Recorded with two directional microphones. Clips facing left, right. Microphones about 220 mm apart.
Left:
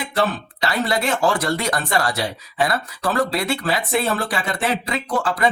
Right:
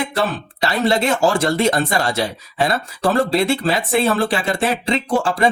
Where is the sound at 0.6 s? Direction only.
25° right (ahead or behind).